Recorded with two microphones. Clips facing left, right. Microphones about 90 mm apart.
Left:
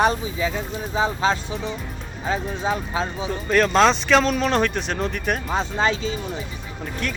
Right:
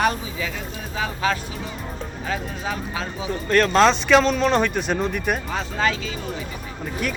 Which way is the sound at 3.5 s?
Centre (ahead or behind).